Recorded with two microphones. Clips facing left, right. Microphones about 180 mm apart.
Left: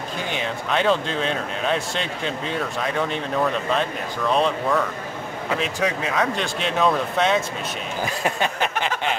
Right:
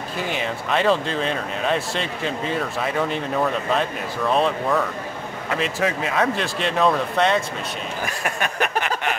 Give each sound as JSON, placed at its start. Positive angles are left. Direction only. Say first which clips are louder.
{"t": 0.3, "sound": "speech", "louder": "right 1 dB", "side_deg": 0}
{"t": 4.3, "sound": "speech", "louder": "even", "side_deg": 0}
{"t": 8.0, "sound": "speech", "louder": "left 4 dB", "side_deg": 25}